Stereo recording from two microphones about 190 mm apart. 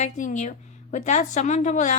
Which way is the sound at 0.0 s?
40° left (ahead or behind).